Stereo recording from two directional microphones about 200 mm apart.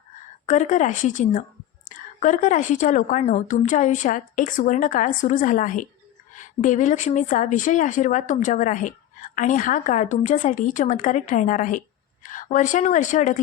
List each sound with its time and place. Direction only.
0.4 s speech: 35° left (ahead or behind)